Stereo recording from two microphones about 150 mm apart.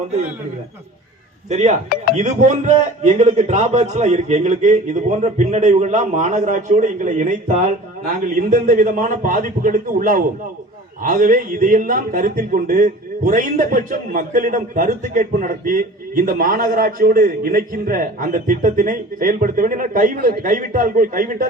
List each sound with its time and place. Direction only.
1.5 s a man's voice: 50° right (ahead or behind)